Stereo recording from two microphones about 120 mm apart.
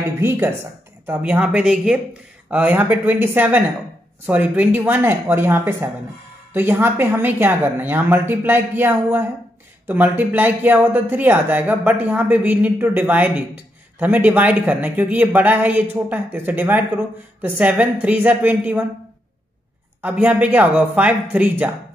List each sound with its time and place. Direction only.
1.0 s speech: 15° right (ahead or behind)
20.0 s speech: 15° right (ahead or behind)